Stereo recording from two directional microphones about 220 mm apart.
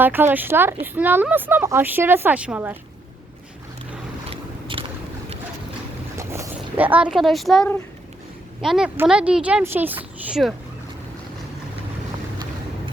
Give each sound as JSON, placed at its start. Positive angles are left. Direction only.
{"t": 0.0, "sound": "speech", "side_deg": -10}
{"t": 4.7, "sound": "boat", "side_deg": -25}
{"t": 6.1, "sound": "speech", "side_deg": -10}